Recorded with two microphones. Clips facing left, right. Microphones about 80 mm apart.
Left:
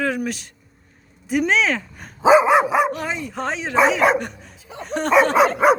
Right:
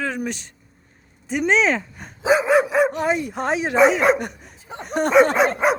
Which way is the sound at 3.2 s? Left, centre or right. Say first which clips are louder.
Right 3 dB; centre.